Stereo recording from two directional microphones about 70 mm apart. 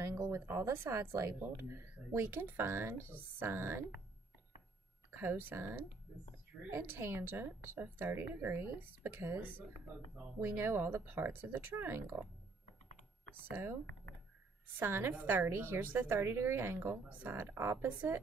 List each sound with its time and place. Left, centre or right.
0.0 s speech: right
5.1 s speech: right
13.5 s speech: right
14.8 s speech: right